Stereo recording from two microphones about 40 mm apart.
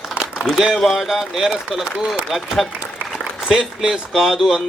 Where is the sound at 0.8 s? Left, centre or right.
Centre.